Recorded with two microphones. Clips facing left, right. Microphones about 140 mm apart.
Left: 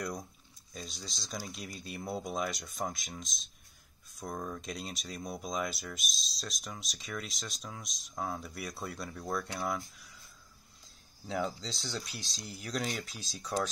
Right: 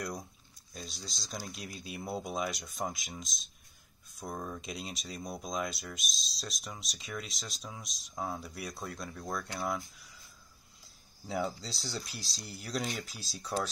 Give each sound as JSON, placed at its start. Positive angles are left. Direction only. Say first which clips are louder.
{"t": 0.7, "sound": "speech", "louder": "left 1 dB", "side_deg": 0}
{"t": 11.2, "sound": "speech", "louder": "even", "side_deg": -5}